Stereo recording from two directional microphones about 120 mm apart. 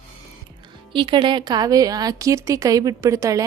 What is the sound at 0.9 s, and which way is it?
A woman's voice, 45° right (ahead or behind).